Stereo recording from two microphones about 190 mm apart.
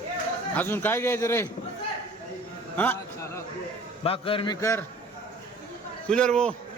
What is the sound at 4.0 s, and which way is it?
Speech, 30° left (ahead or behind).